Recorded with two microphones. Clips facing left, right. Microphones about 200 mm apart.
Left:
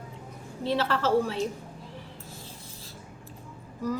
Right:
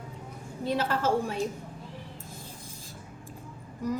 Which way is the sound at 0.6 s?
15° right (ahead or behind).